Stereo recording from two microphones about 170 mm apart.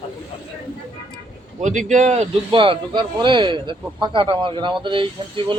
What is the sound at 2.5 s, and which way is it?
Speech, 30° right (ahead or behind).